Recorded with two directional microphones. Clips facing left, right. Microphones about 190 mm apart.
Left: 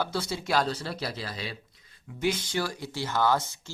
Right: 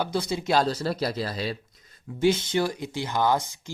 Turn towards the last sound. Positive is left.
turn(degrees=-15)  # may be behind; listen again after turning